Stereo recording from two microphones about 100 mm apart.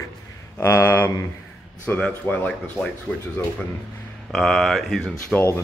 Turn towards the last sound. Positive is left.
turn(degrees=25)  # may be behind; listen again after turning